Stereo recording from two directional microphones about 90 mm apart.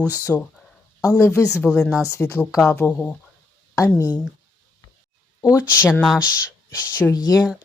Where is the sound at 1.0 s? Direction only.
30° left (ahead or behind).